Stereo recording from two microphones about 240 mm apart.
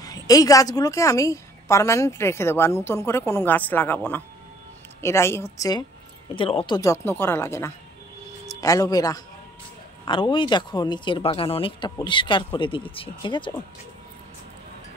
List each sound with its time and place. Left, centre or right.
0.0 s a woman's voice: centre